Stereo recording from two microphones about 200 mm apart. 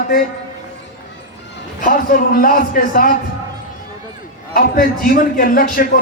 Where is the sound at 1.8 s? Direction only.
45° left (ahead or behind).